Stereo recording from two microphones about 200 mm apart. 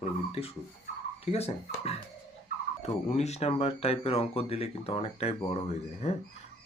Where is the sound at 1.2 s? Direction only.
30° left (ahead or behind).